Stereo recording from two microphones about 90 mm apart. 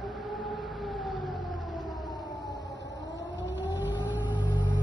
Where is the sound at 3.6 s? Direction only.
20° right (ahead or behind).